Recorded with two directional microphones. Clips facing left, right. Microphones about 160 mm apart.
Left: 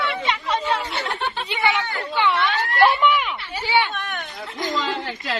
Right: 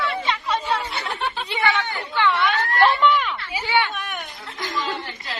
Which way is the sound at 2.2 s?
15° left (ahead or behind).